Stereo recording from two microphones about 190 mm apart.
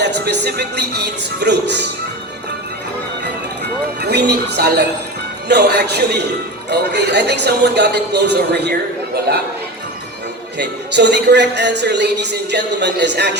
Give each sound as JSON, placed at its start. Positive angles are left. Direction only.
{"t": 0.0, "sound": "speech", "side_deg": -65}
{"t": 3.6, "sound": "speech", "side_deg": -60}
{"t": 10.6, "sound": "speech", "side_deg": -65}